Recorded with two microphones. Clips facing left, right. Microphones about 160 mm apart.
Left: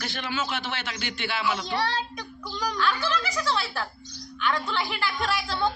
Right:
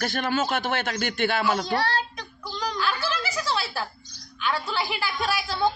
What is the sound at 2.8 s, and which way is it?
Snicker, 5° right (ahead or behind).